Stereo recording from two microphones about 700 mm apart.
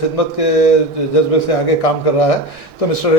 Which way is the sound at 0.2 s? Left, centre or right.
Left.